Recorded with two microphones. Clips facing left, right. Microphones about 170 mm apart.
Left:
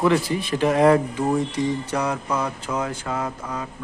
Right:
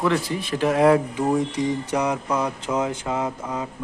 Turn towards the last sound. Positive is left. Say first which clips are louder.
# right 2 dB
turn(degrees=-20)  # may be behind; listen again after turning